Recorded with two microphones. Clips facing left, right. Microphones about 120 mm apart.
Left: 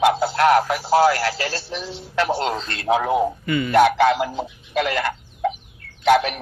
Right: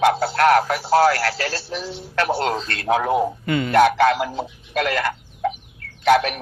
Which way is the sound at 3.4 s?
65° right (ahead or behind).